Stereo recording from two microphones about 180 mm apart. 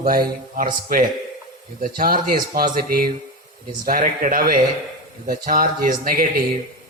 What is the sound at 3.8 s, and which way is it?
Speech, 50° right (ahead or behind).